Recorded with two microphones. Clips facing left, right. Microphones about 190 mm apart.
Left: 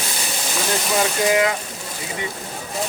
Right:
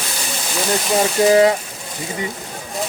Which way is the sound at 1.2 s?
35° right (ahead or behind).